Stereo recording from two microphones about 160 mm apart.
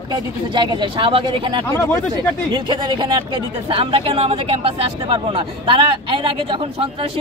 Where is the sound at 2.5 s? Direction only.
30° right (ahead or behind).